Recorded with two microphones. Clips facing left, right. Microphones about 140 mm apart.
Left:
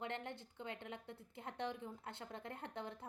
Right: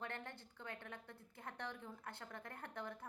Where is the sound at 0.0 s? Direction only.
20° left (ahead or behind).